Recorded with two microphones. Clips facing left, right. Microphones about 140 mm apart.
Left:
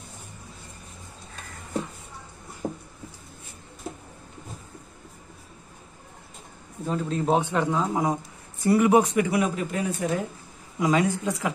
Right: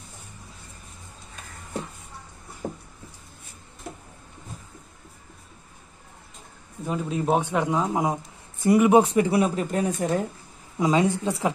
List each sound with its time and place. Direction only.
2.6 s a sound: centre (ahead or behind)
6.9 s speech: 10° right (ahead or behind); by 10.1 s 40° right (ahead or behind)
10.8 s a woman's voice: 25° right (ahead or behind)